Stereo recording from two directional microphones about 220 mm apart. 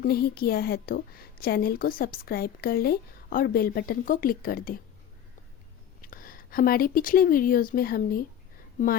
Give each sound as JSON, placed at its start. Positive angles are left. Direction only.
{"t": 0.0, "sound": "a woman's voice", "side_deg": 45}
{"t": 6.0, "sound": "speech", "side_deg": 40}